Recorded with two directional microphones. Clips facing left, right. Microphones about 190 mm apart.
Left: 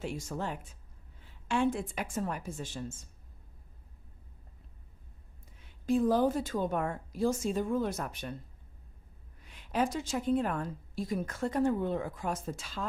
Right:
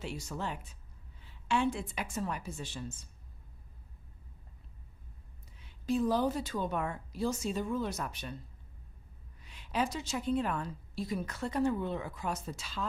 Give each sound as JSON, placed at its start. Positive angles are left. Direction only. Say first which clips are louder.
{"t": 0.0, "sound": "a woman's voice", "louder": "left 2 dB", "side_deg": 50}
{"t": 5.6, "sound": "a woman's voice", "louder": "left 3 dB", "side_deg": 50}
{"t": 9.4, "sound": "a woman's voice", "louder": "left 3 dB", "side_deg": 50}